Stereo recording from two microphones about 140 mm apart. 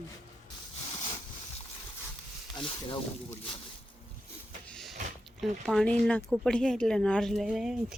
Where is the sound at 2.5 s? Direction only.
35° left (ahead or behind).